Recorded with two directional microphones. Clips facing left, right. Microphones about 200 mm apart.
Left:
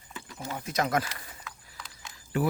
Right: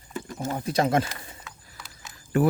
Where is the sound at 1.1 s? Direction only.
25° right (ahead or behind).